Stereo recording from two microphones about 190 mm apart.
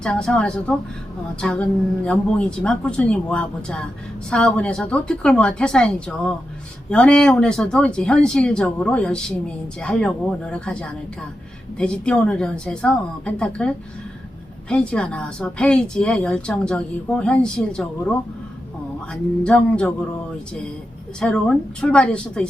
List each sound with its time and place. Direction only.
0.0 s a woman's voice: 5° left (ahead or behind)
14.7 s a woman's voice: 5° left (ahead or behind)
19.1 s a woman's voice: 5° left (ahead or behind)
21.2 s a woman's voice: 5° left (ahead or behind)